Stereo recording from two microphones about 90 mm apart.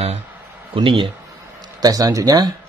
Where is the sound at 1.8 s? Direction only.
40° right (ahead or behind).